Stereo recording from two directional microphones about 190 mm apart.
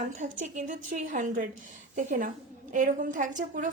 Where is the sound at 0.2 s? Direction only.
40° right (ahead or behind).